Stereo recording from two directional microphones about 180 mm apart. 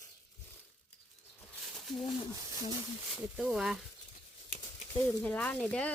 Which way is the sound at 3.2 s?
5° right (ahead or behind).